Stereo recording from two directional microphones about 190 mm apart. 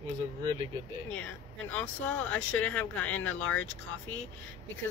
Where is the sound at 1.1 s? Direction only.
10° left (ahead or behind).